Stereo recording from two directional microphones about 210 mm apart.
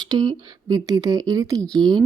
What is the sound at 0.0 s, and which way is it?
Speech, 20° right (ahead or behind).